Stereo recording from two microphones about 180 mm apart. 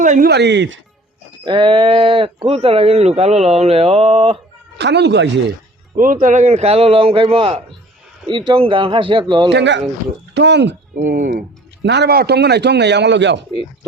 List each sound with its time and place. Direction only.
0.0 s speech: 45° right (ahead or behind)
0.3 s a man's voice: 70° right (ahead or behind)
1.5 s speech: 25° right (ahead or behind)
4.8 s a man's voice: 70° right (ahead or behind)
6.0 s speech: 50° right (ahead or behind); by 9.5 s 25° right (ahead or behind)
9.5 s a man's voice: 75° right (ahead or behind)
10.9 s speech: 50° right (ahead or behind)
11.8 s a man's voice: 70° right (ahead or behind)